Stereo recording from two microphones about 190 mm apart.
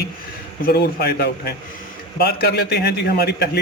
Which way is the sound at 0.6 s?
55° left (ahead or behind).